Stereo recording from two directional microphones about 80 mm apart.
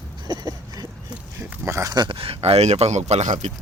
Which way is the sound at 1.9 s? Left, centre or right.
Right.